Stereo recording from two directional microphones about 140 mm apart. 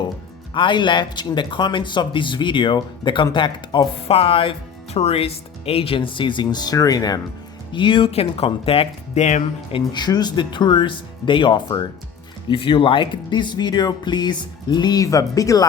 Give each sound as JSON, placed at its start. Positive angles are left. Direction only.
{"t": 0.5, "sound": "speech", "side_deg": 35}
{"t": 9.7, "sound": "speech", "side_deg": 30}